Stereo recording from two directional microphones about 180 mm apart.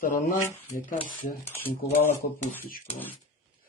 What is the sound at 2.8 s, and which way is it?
Speech, 10° left (ahead or behind).